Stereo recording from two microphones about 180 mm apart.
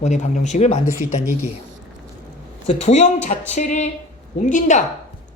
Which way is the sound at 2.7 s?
40° left (ahead or behind).